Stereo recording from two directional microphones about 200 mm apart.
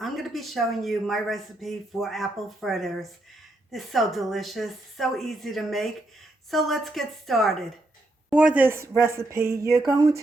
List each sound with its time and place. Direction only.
0.0 s a woman's voice: centre (ahead or behind); by 10.2 s 15° right (ahead or behind)